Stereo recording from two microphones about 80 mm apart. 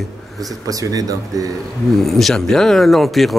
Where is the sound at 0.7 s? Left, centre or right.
Right.